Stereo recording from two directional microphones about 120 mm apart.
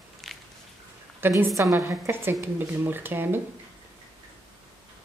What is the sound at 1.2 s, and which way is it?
A woman's voice, 20° right (ahead or behind).